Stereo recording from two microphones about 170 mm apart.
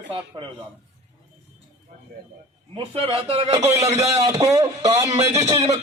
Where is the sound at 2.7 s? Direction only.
35° right (ahead or behind).